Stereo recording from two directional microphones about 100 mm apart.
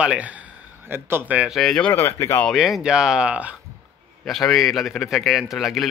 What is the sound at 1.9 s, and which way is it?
Speech, 25° left (ahead or behind).